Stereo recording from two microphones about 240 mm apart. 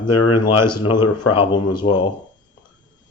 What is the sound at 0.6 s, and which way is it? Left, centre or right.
Speech, centre.